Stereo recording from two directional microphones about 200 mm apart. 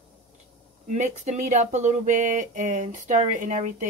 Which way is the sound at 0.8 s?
40° right (ahead or behind).